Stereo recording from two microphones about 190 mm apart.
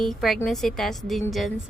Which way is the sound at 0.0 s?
Centre (ahead or behind).